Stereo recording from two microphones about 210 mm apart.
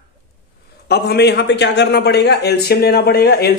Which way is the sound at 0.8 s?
50° left (ahead or behind).